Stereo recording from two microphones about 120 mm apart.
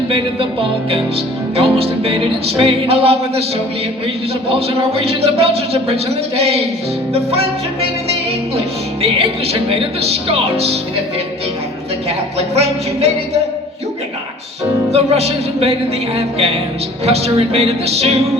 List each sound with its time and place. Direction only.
0.1 s music: 50° right (ahead or behind)
4.4 s speech: 55° right (ahead or behind)
12.0 s speech: 60° right (ahead or behind)
14.9 s speech: 60° right (ahead or behind)
17.1 s speech: 60° right (ahead or behind)